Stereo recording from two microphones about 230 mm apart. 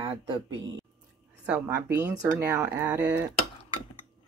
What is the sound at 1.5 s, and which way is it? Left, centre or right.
Speech, centre.